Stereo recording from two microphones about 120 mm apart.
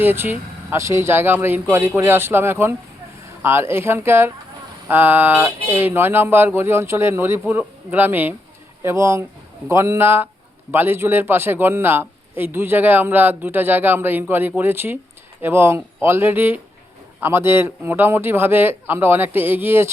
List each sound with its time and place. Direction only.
0.0 s a man's voice: 15° right (ahead or behind)